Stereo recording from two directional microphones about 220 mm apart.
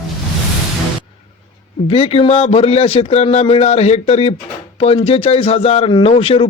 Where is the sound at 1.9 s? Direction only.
25° left (ahead or behind).